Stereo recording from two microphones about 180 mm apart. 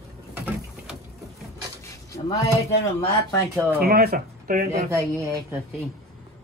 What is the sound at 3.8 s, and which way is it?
Speech, 60° right (ahead or behind).